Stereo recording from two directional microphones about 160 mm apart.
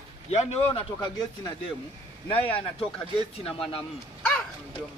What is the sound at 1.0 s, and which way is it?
Speech, 25° left (ahead or behind).